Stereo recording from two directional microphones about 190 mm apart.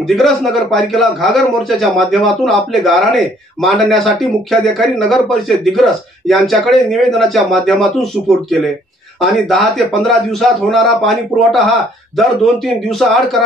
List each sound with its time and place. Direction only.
0.1 s speech: centre (ahead or behind)